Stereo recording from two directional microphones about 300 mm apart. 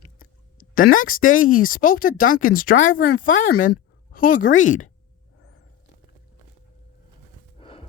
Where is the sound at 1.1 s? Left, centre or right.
Left.